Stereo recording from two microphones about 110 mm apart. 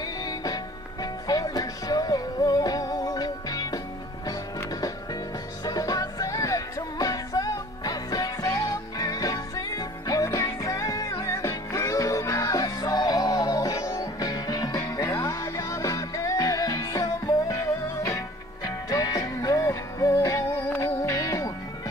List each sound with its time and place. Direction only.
1.2 s music: 35° left (ahead or behind)
5.7 s music: 35° left (ahead or behind)